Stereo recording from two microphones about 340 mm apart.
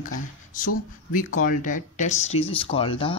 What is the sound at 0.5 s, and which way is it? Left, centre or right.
Speech, left.